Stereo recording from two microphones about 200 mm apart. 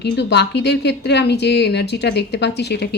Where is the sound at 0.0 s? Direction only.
55° left (ahead or behind).